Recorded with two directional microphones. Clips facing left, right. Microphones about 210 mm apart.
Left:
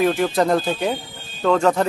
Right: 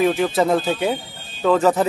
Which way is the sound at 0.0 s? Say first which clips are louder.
Even; centre (ahead or behind).